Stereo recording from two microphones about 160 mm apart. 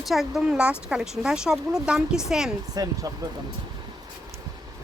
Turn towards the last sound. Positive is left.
turn(degrees=-25)  # may be behind; listen again after turning